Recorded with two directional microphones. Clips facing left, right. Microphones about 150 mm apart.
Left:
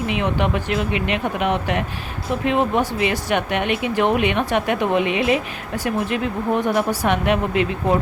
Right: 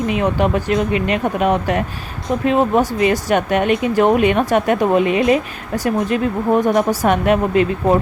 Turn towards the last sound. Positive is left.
turn(degrees=-40)  # may be behind; listen again after turning